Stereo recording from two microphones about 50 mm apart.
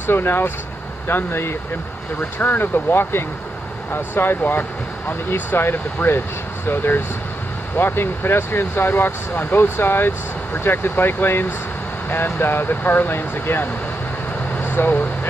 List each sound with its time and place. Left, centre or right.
0.0 s speech: left
14.6 s vehicle: left